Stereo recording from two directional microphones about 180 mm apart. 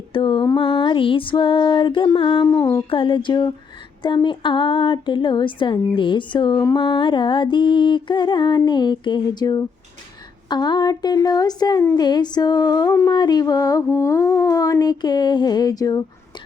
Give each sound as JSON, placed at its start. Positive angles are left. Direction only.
{"t": 0.1, "sound": "speech", "side_deg": 25}